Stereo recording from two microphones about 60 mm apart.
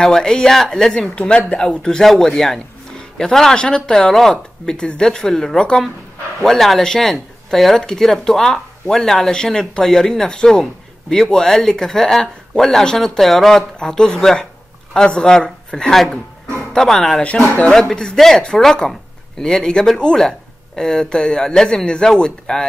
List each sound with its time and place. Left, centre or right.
0.0 s speech: centre
17.2 s speech: left
17.7 s speech: centre